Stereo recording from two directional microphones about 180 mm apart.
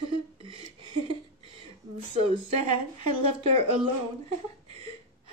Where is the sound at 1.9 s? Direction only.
35° right (ahead or behind).